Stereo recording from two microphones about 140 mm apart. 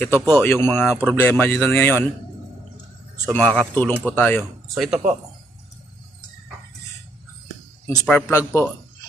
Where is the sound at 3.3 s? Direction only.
10° left (ahead or behind).